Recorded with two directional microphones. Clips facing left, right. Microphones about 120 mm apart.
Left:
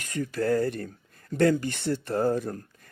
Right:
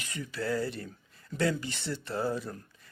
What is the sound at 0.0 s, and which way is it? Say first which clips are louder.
Speech: left 7 dB; 50° left (ahead or behind).